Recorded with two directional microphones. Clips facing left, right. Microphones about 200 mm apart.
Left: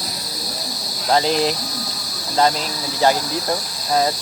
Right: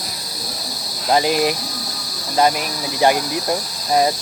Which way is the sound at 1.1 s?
10° right (ahead or behind).